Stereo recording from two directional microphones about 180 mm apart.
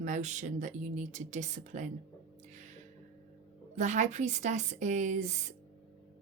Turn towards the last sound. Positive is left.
turn(degrees=-40)  # may be behind; listen again after turning